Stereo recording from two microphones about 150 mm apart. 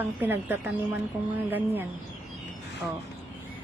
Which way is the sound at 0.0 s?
15° right (ahead or behind).